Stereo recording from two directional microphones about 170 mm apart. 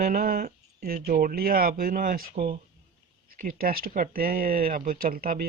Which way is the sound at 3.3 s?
55° right (ahead or behind).